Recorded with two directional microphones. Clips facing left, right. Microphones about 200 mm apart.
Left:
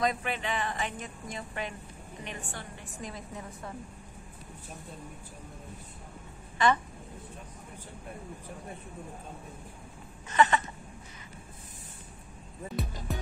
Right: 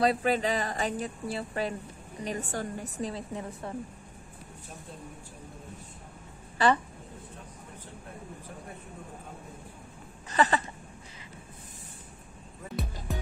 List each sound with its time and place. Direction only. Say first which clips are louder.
0.0 s speech: right 5 dB; 35° right (ahead or behind)
6.6 s speech: right 2 dB; 35° right (ahead or behind)
10.3 s a sound: left 1 dB; 35° right (ahead or behind)